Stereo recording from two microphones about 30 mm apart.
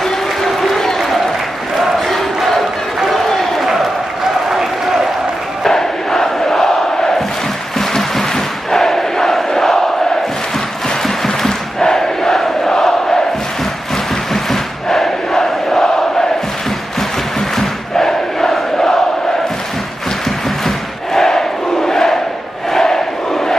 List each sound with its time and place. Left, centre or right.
0.0 s applause: centre
1.8 s crowd: centre
3.1 s a sound: centre
5.6 s crowd: centre
7.8 s a sound: centre
8.7 s crowd: centre
11.2 s crowd: centre
14.3 s crowd: centre
17.6 s crowd: centre
20.2 s crowd: centre